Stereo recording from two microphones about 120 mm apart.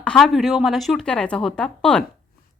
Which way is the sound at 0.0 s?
5° left (ahead or behind).